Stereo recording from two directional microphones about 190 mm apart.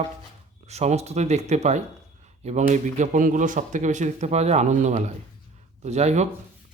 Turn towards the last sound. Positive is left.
turn(degrees=-35)  # may be behind; listen again after turning